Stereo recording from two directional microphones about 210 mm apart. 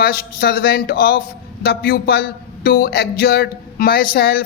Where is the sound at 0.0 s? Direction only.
45° left (ahead or behind).